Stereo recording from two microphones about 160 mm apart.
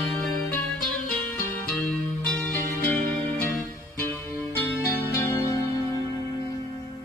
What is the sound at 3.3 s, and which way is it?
Music, 5° left (ahead or behind).